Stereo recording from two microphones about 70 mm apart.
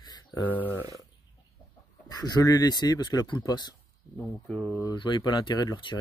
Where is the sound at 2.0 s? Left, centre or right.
Left.